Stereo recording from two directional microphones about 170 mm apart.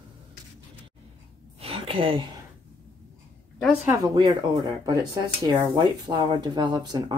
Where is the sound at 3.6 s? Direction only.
5° right (ahead or behind).